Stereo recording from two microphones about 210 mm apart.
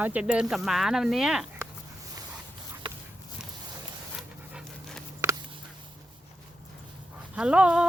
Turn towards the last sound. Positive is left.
turn(degrees=-5)  # may be behind; listen again after turning